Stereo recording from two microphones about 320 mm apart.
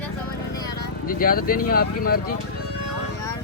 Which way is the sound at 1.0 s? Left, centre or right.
Left.